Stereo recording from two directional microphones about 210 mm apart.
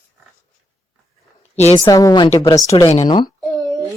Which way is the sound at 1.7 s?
15° left (ahead or behind).